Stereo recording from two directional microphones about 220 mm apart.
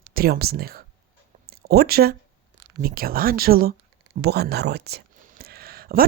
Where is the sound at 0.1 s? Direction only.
45° right (ahead or behind).